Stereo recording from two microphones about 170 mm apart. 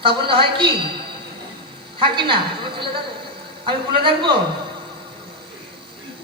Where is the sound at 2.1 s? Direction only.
30° right (ahead or behind).